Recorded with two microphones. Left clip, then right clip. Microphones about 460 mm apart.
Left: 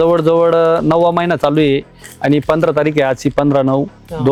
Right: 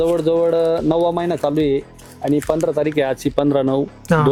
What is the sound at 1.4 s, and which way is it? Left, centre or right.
Speech, left.